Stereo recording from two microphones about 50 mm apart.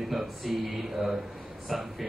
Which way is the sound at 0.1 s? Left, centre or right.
Centre.